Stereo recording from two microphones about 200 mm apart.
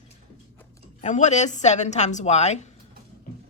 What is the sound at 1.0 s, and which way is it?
A woman's voice, 35° left (ahead or behind).